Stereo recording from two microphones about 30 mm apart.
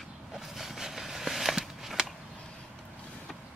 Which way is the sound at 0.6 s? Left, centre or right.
Centre.